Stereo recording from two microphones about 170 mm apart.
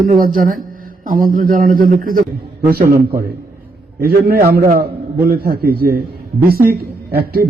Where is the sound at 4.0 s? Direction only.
60° right (ahead or behind).